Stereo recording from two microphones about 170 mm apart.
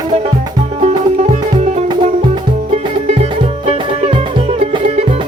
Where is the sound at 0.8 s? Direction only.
40° right (ahead or behind).